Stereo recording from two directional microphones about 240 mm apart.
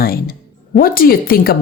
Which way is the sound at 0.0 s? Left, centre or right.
Left.